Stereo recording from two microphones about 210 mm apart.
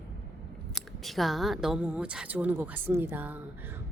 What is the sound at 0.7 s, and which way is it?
A woman's voice, centre (ahead or behind).